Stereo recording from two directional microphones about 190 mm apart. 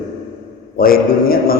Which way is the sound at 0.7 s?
50° left (ahead or behind).